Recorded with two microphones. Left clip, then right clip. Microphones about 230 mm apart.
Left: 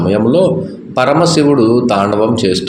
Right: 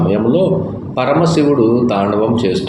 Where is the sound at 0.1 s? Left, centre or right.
Left.